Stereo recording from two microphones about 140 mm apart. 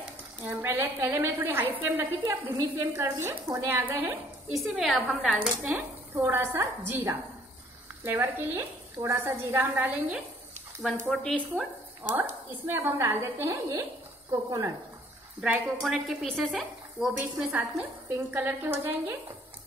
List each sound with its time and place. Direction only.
0.5 s a woman's voice: 15° right (ahead or behind)
4.6 s speech: centre (ahead or behind)
5.6 s a woman's voice: 10° right (ahead or behind)
11.1 s speech: 5° left (ahead or behind)
11.5 s a woman's voice: 10° right (ahead or behind)
15.4 s a woman's voice: 10° right (ahead or behind)
17.4 s a woman's voice: 10° right (ahead or behind)